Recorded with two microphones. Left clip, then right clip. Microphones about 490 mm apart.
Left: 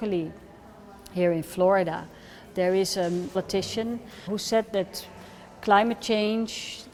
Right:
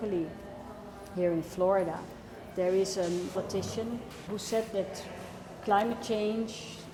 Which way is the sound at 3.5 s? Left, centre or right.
Left.